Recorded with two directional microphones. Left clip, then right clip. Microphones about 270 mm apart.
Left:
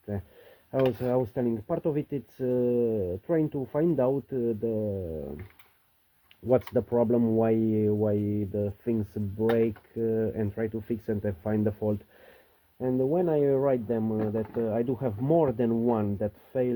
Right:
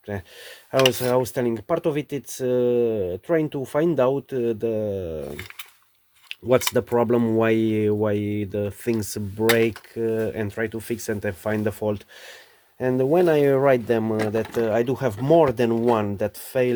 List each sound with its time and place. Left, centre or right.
0.7 s speech: centre
6.2 s speech: centre
12.8 s speech: right